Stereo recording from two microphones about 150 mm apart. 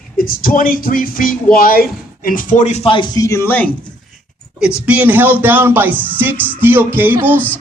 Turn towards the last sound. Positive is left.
turn(degrees=-15)  # may be behind; listen again after turning